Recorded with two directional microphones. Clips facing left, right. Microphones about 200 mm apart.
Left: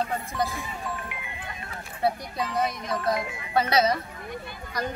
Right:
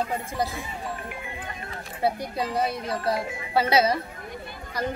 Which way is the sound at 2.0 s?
30° right (ahead or behind).